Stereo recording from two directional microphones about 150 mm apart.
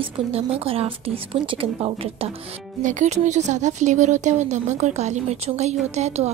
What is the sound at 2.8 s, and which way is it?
Speech, 55° right (ahead or behind).